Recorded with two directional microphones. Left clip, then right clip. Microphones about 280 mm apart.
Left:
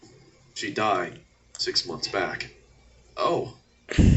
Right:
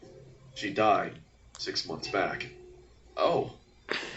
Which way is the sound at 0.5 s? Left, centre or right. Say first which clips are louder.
Even; centre.